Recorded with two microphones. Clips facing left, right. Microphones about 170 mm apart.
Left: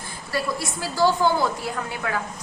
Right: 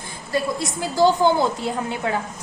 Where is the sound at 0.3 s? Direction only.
20° right (ahead or behind).